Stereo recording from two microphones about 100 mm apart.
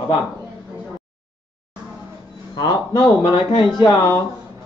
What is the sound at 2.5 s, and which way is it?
Speech, 40° left (ahead or behind).